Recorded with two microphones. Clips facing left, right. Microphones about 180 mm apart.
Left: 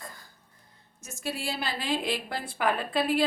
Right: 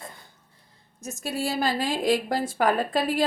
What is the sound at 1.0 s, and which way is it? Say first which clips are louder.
Speech: right 5 dB; 45° right (ahead or behind).